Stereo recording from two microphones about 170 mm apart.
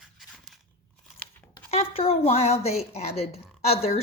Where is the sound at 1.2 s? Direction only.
10° left (ahead or behind).